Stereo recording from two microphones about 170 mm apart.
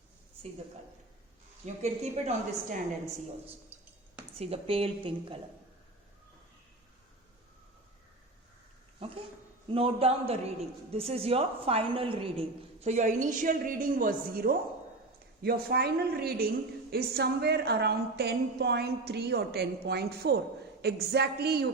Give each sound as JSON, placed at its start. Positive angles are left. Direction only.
{"t": 1.6, "sound": "a woman's voice", "side_deg": -40}
{"t": 4.4, "sound": "a woman's voice", "side_deg": -35}
{"t": 9.6, "sound": "a woman's voice", "side_deg": -35}